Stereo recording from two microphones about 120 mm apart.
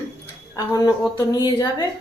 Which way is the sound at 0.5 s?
30° left (ahead or behind).